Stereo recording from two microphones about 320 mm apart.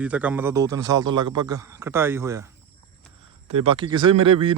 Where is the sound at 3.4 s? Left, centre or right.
Centre.